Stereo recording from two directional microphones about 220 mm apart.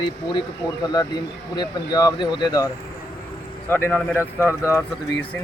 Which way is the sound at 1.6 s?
15° left (ahead or behind).